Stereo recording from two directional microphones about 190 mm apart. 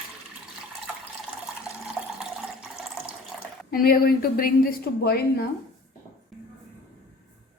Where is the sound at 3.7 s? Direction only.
50° left (ahead or behind).